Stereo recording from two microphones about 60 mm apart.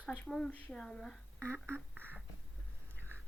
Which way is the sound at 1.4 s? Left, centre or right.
Right.